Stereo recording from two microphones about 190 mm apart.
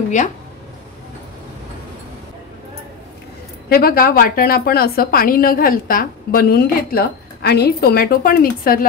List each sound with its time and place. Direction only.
3.6 s a woman's voice: 50° left (ahead or behind)